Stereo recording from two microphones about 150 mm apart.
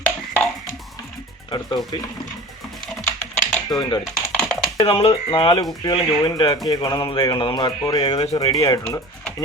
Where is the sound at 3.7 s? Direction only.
30° left (ahead or behind).